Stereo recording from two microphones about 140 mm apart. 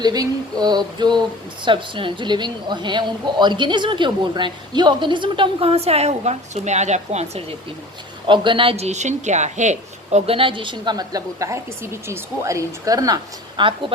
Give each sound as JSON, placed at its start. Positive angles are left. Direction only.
{"t": 0.0, "sound": "a woman's voice", "side_deg": -30}
{"t": 8.3, "sound": "a woman's voice", "side_deg": -35}
{"t": 13.6, "sound": "a woman's voice", "side_deg": -35}